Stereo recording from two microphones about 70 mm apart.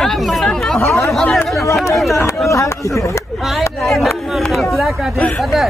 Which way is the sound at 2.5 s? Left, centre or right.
Left.